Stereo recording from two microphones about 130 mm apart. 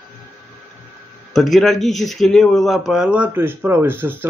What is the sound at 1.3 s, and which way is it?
Speech, centre (ahead or behind).